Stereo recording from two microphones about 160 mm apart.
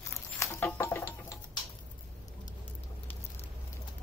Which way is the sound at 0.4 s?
15° left (ahead or behind).